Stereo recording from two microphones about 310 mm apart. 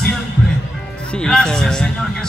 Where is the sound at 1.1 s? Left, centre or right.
Centre.